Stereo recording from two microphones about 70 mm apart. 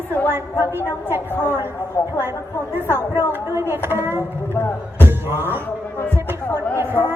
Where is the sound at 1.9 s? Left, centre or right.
Left.